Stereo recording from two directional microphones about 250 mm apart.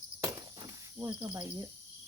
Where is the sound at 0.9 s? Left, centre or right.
Centre.